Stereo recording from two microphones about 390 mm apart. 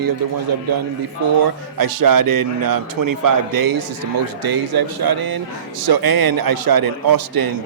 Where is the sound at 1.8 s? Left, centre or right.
Right.